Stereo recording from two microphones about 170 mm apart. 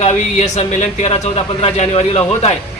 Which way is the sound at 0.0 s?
45° left (ahead or behind).